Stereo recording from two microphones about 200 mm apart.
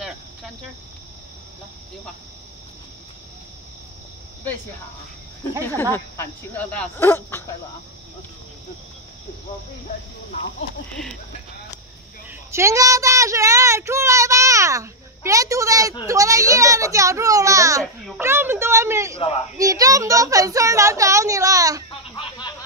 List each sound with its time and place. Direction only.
5.8 s speech: 10° left (ahead or behind)
12.3 s a woman's voice: 15° right (ahead or behind)
19.1 s speech: 30° left (ahead or behind)
19.5 s a woman's voice: 15° right (ahead or behind)
22.1 s a sound: 25° left (ahead or behind)